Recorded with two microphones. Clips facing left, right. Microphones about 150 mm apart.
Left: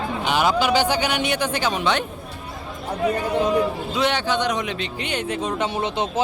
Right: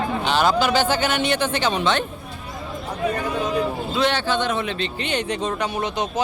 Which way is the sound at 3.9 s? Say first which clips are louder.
Right 1 dB; 15° left (ahead or behind).